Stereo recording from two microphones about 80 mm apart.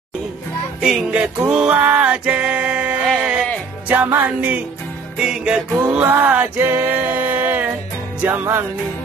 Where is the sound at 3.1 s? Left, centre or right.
Centre.